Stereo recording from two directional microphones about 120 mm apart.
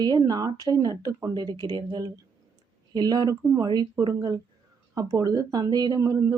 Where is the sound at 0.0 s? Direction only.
35° right (ahead or behind).